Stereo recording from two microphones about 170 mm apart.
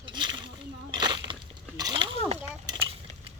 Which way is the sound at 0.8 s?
25° right (ahead or behind).